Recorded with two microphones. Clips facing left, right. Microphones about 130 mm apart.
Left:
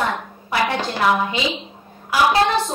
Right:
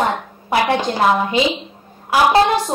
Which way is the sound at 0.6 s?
20° right (ahead or behind).